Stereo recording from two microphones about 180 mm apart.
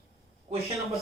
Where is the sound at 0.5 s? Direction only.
15° right (ahead or behind).